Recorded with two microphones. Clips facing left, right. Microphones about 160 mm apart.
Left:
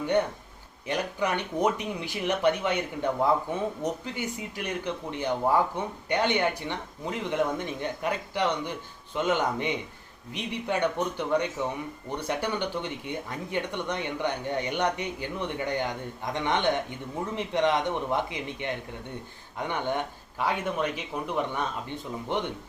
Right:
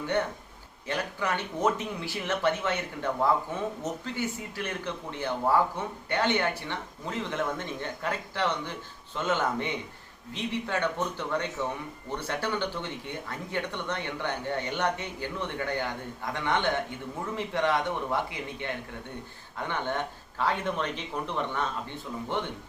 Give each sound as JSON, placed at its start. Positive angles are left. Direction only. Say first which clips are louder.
{"t": 0.9, "sound": "speech", "louder": "left 2 dB", "side_deg": 15}